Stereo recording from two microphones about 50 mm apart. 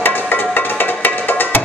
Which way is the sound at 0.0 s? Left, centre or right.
Left.